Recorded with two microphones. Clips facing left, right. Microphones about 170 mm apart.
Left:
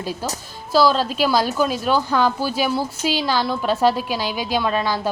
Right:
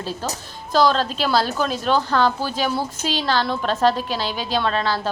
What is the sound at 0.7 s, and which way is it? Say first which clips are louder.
A woman's voice: left 1 dB; 5° left (ahead or behind).